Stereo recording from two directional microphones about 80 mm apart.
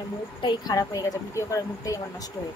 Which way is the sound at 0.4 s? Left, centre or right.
Left.